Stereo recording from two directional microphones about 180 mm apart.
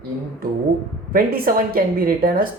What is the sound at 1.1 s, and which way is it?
Speech, 55° right (ahead or behind).